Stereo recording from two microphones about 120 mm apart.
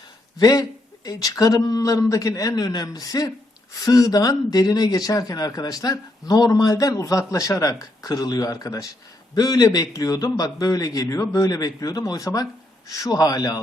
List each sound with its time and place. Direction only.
0.3 s a man's voice: 35° left (ahead or behind)